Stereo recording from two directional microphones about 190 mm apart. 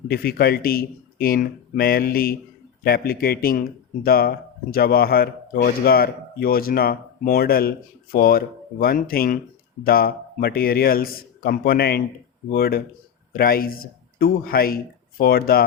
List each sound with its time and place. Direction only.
0.1 s speech: 55° left (ahead or behind)